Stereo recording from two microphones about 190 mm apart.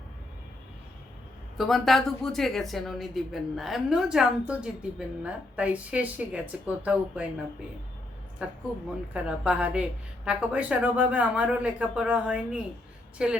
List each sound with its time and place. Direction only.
1.5 s a woman's voice: centre (ahead or behind)
8.4 s a woman's voice: 5° right (ahead or behind)